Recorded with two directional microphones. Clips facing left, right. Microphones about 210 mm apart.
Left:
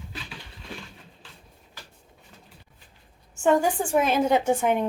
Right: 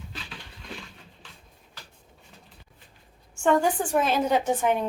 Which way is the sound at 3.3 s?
5° left (ahead or behind).